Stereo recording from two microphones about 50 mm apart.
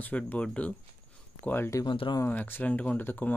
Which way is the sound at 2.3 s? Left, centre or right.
Left.